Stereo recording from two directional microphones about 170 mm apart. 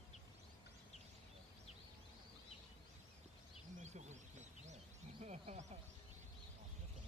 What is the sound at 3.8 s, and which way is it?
Bird, 40° right (ahead or behind).